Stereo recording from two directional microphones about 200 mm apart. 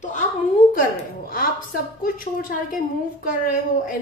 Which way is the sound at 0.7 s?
45° left (ahead or behind).